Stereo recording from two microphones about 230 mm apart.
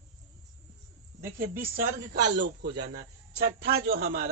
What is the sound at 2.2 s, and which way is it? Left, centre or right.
A man's voice, right.